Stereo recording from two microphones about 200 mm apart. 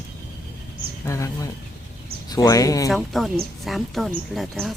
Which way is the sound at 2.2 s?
20° left (ahead or behind).